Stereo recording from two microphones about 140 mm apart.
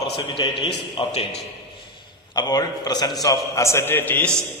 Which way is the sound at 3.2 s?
25° left (ahead or behind).